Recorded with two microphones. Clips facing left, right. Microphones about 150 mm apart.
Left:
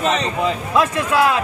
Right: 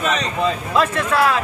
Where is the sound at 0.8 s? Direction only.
15° left (ahead or behind).